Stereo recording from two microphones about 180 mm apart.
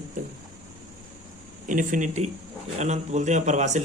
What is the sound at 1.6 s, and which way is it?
Speech, 45° right (ahead or behind).